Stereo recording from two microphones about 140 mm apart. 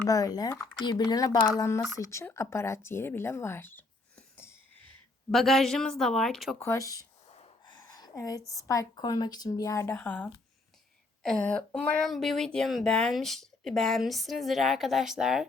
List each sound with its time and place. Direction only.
0.1 s speech: 25° left (ahead or behind)
4.4 s a sound: 15° left (ahead or behind)
5.3 s speech: centre (ahead or behind)
6.6 s a woman's voice: 20° left (ahead or behind); by 15.4 s 5° right (ahead or behind)